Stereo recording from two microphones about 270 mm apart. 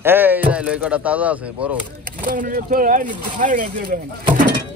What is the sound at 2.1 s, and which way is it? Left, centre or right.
A man's voice, right.